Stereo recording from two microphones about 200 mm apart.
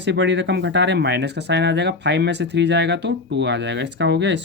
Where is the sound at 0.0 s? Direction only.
65° right (ahead or behind).